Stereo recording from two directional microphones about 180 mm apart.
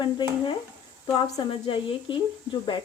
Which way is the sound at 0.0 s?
25° left (ahead or behind).